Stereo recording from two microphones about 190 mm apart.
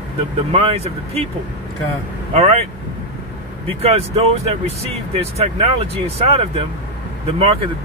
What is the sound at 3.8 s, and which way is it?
Speech, 30° right (ahead or behind).